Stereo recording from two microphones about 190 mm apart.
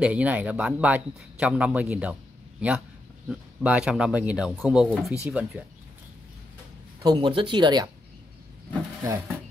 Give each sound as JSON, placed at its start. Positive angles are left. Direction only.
{"t": 0.0, "sound": "speech", "side_deg": -5}
{"t": 7.0, "sound": "speech", "side_deg": -20}